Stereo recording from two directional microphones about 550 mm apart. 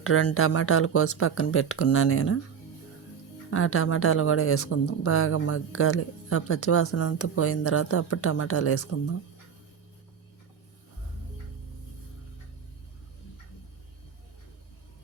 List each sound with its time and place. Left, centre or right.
0.0 s speech: left
3.5 s speech: left